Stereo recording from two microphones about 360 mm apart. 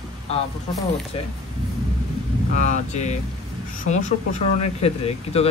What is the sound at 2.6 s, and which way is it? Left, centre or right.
Speech, centre.